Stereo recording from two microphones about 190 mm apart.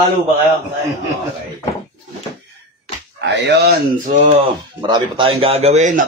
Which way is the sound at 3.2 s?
65° right (ahead or behind).